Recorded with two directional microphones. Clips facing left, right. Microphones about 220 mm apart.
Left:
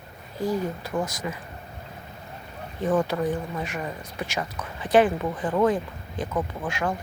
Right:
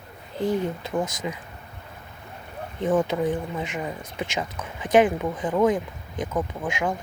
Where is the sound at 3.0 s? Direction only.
20° right (ahead or behind).